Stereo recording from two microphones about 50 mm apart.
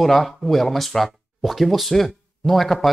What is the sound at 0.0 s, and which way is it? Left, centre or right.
Speech, centre.